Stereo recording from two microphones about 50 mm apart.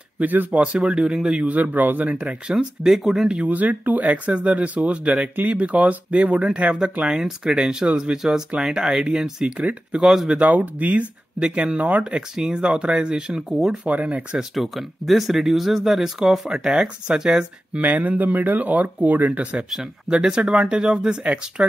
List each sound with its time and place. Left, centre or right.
0.2 s speech: right
0.6 s speech: centre
1.5 s speech: right
2.5 s speech: centre
3.4 s speech: right; by 10.4 s centre
10.4 s speech: right
11.3 s speech: centre
12.0 s speech: centre
17.7 s speech: right
20.1 s speech: centre